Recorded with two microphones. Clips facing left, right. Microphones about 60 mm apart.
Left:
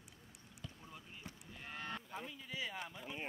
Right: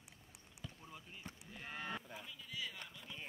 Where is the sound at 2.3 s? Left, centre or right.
Left.